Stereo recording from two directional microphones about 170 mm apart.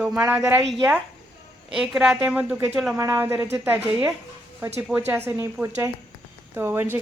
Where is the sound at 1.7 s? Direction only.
5° right (ahead or behind).